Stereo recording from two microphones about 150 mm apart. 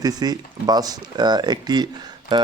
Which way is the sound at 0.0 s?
25° right (ahead or behind).